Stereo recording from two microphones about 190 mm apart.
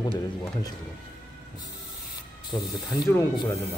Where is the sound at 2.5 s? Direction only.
20° left (ahead or behind).